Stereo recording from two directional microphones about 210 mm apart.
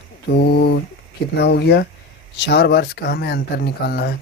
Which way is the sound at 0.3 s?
50° left (ahead or behind).